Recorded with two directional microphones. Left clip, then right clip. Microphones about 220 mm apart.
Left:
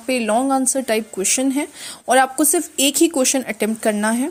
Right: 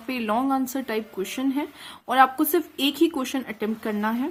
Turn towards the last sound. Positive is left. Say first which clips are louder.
# left 8 dB
turn(degrees=30)  # may be behind; listen again after turning